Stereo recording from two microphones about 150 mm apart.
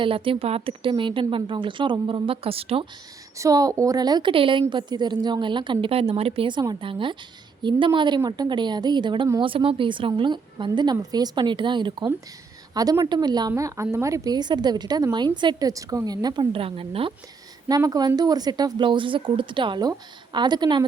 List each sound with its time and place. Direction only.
0.0 s speech: 35° right (ahead or behind)
3.3 s a woman's voice: 20° right (ahead or behind); by 17.2 s 35° right (ahead or behind)
17.7 s a woman's voice: 25° right (ahead or behind)